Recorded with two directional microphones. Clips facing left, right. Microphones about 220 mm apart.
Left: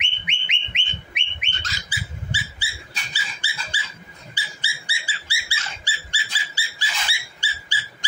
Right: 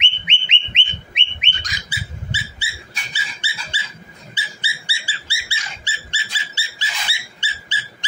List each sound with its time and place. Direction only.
0.0 s bird: 25° right (ahead or behind)
4.4 s dog: 25° right (ahead or behind)